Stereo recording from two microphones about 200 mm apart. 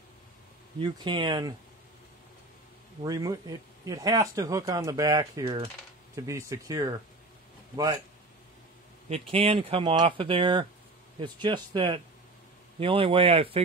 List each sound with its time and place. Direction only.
0.7 s speech: 25° right (ahead or behind)
3.0 s a man's voice: 15° right (ahead or behind)
9.3 s speech: 30° right (ahead or behind)